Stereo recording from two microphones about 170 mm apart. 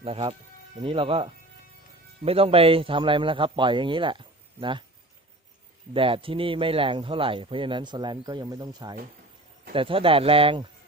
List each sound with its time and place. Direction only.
0.0 s speech: 30° right (ahead or behind)
5.9 s speech: 30° right (ahead or behind)